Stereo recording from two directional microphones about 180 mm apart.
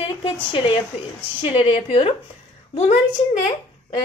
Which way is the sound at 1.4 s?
35° left (ahead or behind).